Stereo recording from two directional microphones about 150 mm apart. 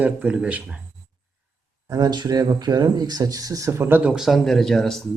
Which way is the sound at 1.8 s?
25° right (ahead or behind).